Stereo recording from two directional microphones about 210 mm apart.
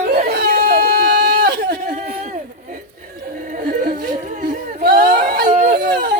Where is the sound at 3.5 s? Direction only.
40° right (ahead or behind).